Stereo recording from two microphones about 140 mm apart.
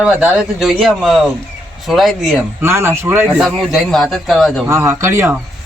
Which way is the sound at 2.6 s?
15° right (ahead or behind).